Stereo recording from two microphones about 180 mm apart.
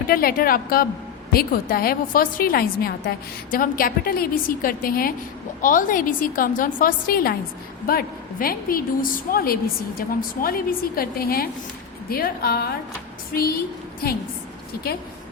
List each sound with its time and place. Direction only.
0.1 s a woman's voice: 55° left (ahead or behind)